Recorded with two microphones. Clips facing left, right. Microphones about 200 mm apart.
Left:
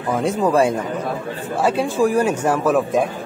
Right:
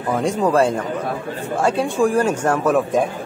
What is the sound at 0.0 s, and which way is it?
A man's voice, 5° left (ahead or behind).